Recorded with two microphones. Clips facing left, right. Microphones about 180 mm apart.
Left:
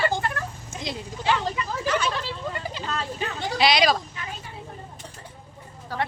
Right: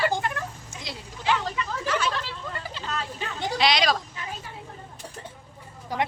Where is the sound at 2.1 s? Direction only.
15° left (ahead or behind).